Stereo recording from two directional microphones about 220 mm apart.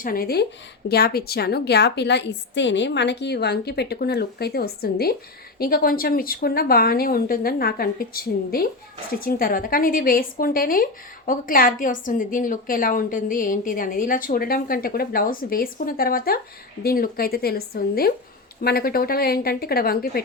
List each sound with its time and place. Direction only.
0.0 s a woman's voice: 40° left (ahead or behind)